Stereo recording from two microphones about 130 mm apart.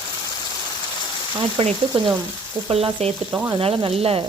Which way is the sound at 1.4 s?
45° right (ahead or behind).